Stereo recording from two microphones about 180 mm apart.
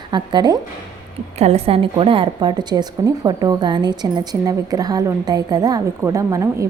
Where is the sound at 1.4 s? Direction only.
35° right (ahead or behind); by 6.6 s 20° right (ahead or behind).